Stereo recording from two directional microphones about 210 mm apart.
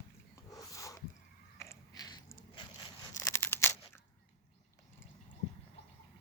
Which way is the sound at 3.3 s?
10° left (ahead or behind).